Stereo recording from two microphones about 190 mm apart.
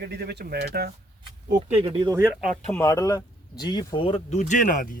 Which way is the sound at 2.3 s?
5° left (ahead or behind).